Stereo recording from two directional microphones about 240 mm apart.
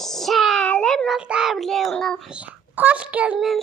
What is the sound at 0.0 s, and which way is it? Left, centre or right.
A child's voice, centre.